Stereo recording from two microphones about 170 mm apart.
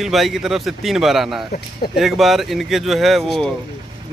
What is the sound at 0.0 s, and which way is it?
Speech, centre (ahead or behind).